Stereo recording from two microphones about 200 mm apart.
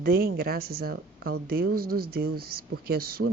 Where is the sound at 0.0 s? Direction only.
50° right (ahead or behind).